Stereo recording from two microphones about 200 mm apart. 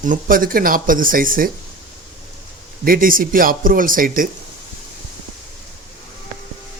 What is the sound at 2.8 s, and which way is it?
Speech, 45° right (ahead or behind).